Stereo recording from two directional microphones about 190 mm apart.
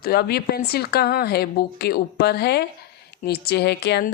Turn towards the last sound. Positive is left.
turn(degrees=60)  # may be behind; listen again after turning